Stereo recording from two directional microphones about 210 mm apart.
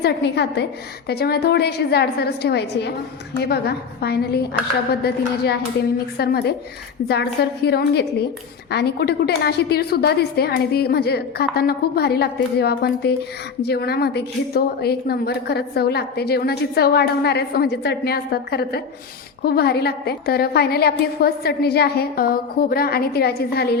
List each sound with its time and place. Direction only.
0.0 s a woman's voice: 55° left (ahead or behind)